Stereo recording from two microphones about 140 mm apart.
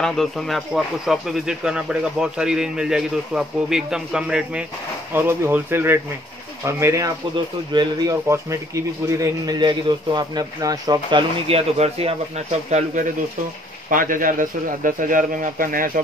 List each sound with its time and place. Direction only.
0.0 s speech: 5° left (ahead or behind)
5.1 s speech: 15° right (ahead or behind)
7.7 s a man's voice: 30° right (ahead or behind)
13.8 s a man's voice: 75° right (ahead or behind)